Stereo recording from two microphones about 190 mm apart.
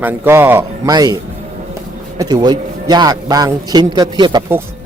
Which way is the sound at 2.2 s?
20° right (ahead or behind).